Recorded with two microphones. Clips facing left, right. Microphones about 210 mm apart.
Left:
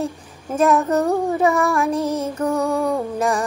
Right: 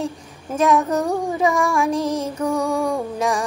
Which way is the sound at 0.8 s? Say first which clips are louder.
Left 3 dB; 10° right (ahead or behind).